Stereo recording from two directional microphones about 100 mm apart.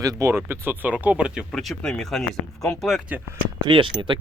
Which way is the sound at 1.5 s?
5° left (ahead or behind).